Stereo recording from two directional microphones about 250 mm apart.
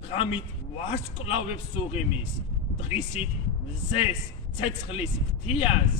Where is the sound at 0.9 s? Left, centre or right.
Left.